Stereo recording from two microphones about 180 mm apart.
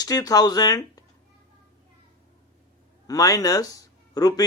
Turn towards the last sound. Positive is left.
turn(degrees=20)  # may be behind; listen again after turning